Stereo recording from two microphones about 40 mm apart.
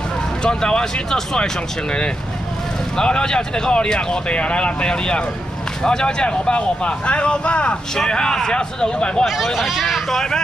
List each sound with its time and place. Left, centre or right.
0.4 s speech: left
9.2 s speech: centre